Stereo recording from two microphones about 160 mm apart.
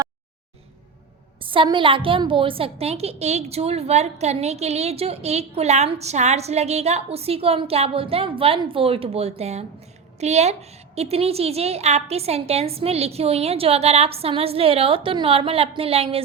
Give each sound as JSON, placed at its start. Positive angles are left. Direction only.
{"t": 1.4, "sound": "a woman's voice", "side_deg": -35}